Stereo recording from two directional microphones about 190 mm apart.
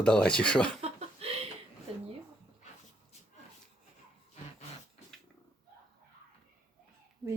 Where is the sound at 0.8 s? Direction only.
30° right (ahead or behind).